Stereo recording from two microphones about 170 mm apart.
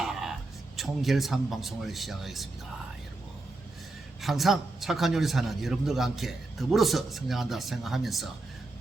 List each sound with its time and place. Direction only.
0.0 s a sound: centre (ahead or behind)
0.8 s a man's voice: centre (ahead or behind)
4.2 s a man's voice: centre (ahead or behind)